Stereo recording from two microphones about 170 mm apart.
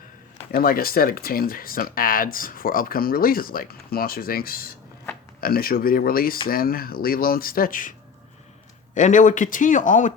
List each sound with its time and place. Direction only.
0.5 s speech: 60° left (ahead or behind)
9.0 s speech: 45° left (ahead or behind)